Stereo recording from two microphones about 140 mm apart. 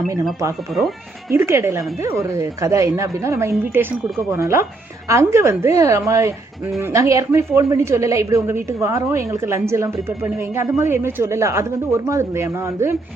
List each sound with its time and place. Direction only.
0.7 s speech: centre (ahead or behind)
1.3 s a woman's voice: 20° right (ahead or behind)